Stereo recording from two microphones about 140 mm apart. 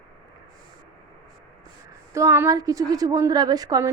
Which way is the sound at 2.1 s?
20° right (ahead or behind).